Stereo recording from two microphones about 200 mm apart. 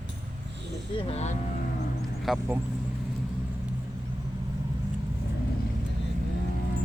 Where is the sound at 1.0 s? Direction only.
30° left (ahead or behind).